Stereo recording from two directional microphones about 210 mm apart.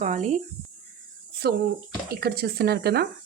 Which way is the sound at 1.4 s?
50° right (ahead or behind).